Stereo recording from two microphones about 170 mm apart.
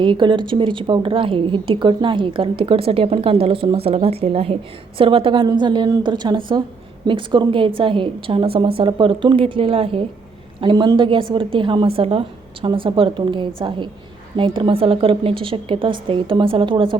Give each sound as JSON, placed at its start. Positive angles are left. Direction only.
{"t": 0.0, "sound": "a woman's voice", "side_deg": -30}